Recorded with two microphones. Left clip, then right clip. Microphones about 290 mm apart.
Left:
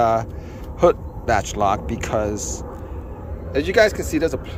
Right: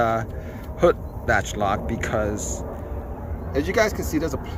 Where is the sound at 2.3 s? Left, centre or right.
Left.